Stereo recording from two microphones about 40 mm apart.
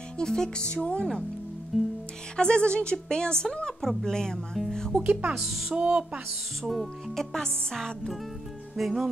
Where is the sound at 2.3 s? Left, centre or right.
Left.